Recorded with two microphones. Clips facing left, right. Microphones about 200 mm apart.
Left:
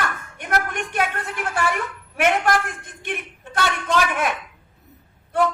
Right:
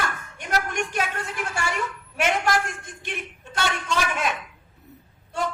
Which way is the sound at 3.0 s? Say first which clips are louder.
Left 5 dB; 55° left (ahead or behind).